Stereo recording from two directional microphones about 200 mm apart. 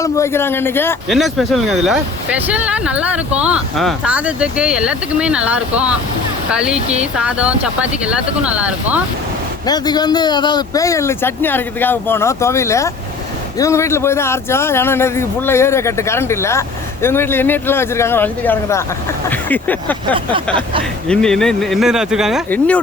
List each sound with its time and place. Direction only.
0.0 s a man's voice: 15° left (ahead or behind)
1.1 s speech: centre (ahead or behind)
6.7 s speech: 30° right (ahead or behind)
7.0 s speech: 5° right (ahead or behind)
9.6 s a man's voice: 20° left (ahead or behind)